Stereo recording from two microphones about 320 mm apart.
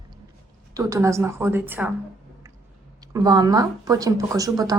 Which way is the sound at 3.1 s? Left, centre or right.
Centre.